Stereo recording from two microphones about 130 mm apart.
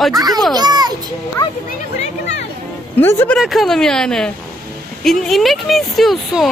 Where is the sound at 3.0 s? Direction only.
15° left (ahead or behind).